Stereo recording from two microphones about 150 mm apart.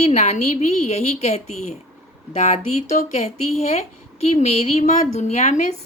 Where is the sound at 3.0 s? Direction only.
45° left (ahead or behind).